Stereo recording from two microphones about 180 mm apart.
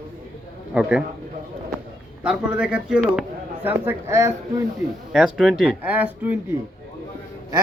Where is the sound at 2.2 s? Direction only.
5° right (ahead or behind).